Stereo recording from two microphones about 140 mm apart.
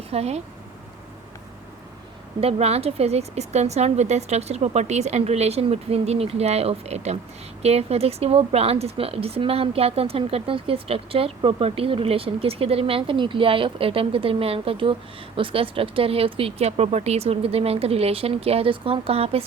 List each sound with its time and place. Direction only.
0.1 s speech: 50° right (ahead or behind)
2.4 s speech: 45° right (ahead or behind)